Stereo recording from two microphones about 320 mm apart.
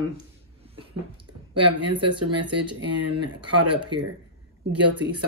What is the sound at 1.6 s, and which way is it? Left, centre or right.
Speech, right.